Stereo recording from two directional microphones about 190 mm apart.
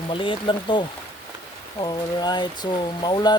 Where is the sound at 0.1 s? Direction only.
25° left (ahead or behind).